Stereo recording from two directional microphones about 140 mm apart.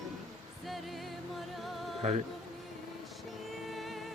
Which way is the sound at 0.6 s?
Centre (ahead or behind).